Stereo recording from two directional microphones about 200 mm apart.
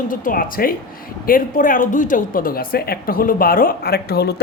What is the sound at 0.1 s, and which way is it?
A woman's voice, 45° left (ahead or behind).